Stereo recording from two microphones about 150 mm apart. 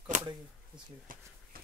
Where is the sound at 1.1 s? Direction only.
70° right (ahead or behind).